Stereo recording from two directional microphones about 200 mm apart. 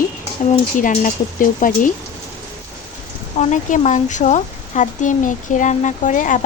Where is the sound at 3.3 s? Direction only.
40° left (ahead or behind).